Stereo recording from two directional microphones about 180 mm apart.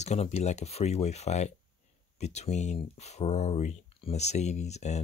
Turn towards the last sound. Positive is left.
turn(degrees=40)  # may be behind; listen again after turning